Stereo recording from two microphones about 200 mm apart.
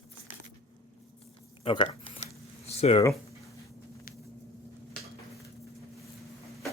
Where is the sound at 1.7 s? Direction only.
25° left (ahead or behind).